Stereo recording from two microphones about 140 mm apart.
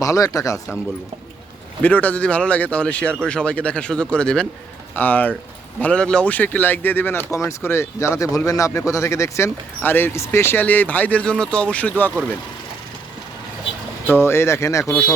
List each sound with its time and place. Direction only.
0.0 s speech: 25° left (ahead or behind)
1.8 s speech: 10° left (ahead or behind)
14.1 s speech: 15° left (ahead or behind)